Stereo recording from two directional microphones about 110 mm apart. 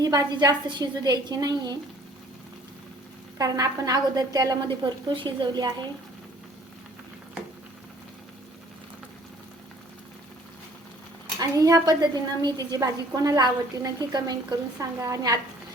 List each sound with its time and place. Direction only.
0.0 s a woman's voice: 35° right (ahead or behind)
3.3 s a woman's voice: 35° right (ahead or behind)
4.8 s a woman's voice: 45° right (ahead or behind)
11.3 s a woman's voice: 30° right (ahead or behind)